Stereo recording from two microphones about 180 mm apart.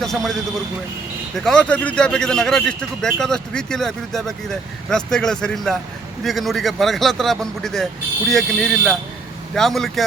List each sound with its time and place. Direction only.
0.0 s a man's voice: centre (ahead or behind)
1.5 s a man's voice: 5° left (ahead or behind)